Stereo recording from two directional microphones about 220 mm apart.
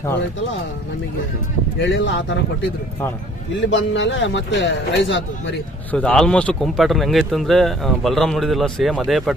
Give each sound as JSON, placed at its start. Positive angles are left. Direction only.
{"t": 1.8, "sound": "a man's voice", "side_deg": 55}
{"t": 3.7, "sound": "a man's voice", "side_deg": 55}
{"t": 5.9, "sound": "speech", "side_deg": 5}